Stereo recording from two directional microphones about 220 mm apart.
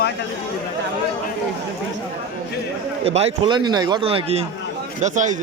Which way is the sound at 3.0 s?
30° right (ahead or behind).